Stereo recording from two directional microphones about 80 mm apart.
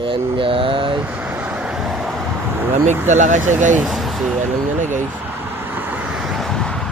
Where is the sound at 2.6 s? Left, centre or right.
Right.